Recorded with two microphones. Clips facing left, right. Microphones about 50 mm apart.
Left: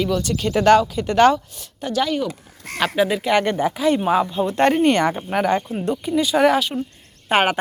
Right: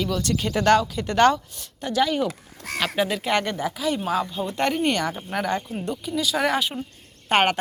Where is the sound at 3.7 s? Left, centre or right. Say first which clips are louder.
Left 7 dB; left.